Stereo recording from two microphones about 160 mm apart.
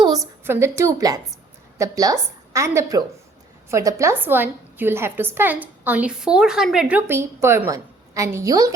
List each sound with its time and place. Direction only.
0.4 s a woman's voice: 15° right (ahead or behind)